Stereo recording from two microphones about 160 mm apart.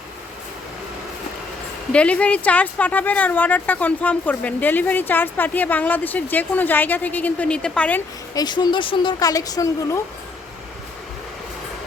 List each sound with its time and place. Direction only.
1.9 s speech: 10° left (ahead or behind)
8.4 s speech: 25° left (ahead or behind)